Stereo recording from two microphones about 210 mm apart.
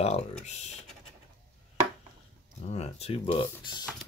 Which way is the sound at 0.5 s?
35° left (ahead or behind).